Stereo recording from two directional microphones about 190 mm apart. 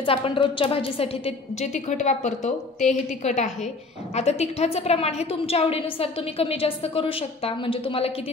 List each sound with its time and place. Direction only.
0.0 s a woman's voice: 30° left (ahead or behind)